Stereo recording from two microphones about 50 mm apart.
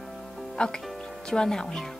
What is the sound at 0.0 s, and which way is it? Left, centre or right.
Music, centre.